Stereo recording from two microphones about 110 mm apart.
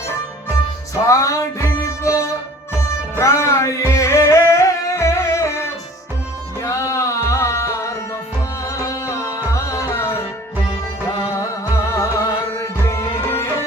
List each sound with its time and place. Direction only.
1.0 s music: 30° left (ahead or behind)
9.7 s tabla: 25° left (ahead or behind)
11.9 s music: 25° left (ahead or behind)